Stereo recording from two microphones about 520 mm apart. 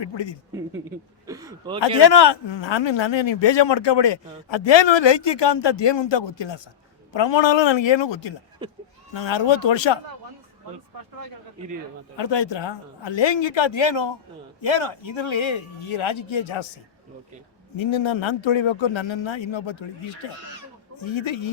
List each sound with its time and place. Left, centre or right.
0.0 s speech: left
1.3 s speech: centre
2.0 s a man's voice: left
8.6 s speech: centre
9.1 s a man's voice: left
12.1 s a man's voice: left
17.7 s a man's voice: left